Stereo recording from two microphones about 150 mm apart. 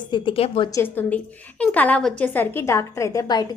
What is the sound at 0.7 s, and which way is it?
A woman's voice, 15° left (ahead or behind).